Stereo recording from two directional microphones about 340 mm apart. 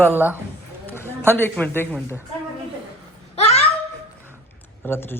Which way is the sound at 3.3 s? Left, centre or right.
Centre.